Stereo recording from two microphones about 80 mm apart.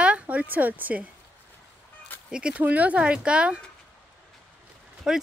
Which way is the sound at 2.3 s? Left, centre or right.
Centre.